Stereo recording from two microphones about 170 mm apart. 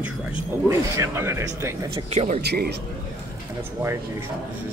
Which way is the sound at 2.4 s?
75° right (ahead or behind).